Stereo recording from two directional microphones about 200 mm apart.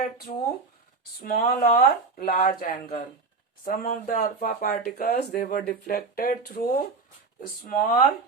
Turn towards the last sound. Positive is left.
turn(degrees=45)  # may be behind; listen again after turning